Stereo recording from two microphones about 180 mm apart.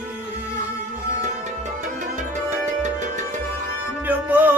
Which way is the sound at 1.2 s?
40° right (ahead or behind).